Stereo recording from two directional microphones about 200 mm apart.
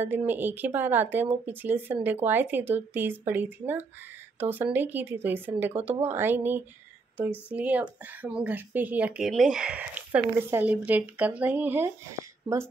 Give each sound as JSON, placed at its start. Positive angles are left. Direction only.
{"t": 0.0, "sound": "speech", "side_deg": -10}